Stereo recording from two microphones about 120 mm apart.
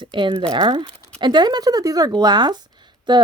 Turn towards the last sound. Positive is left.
turn(degrees=-40)  # may be behind; listen again after turning